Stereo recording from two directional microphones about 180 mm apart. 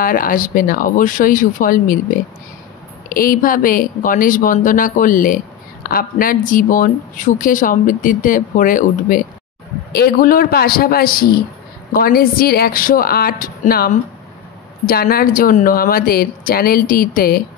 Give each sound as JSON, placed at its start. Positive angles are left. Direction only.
{"t": 0.0, "sound": "speech", "side_deg": 50}